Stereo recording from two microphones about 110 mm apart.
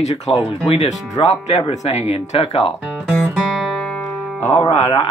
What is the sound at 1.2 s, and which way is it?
Speech, 85° left.